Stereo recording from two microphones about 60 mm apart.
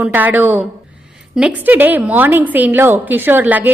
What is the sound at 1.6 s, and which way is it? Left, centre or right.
A woman's voice, right.